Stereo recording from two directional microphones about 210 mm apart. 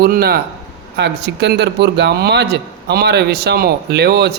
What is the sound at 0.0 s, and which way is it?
A man's voice, 45° right (ahead or behind).